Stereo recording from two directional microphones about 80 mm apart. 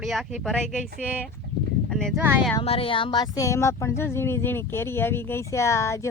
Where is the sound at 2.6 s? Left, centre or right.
Left.